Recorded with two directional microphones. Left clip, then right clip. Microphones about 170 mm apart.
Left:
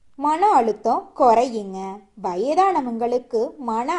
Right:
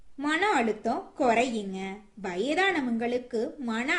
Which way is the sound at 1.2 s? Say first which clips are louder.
Left 9 dB; 10° left (ahead or behind).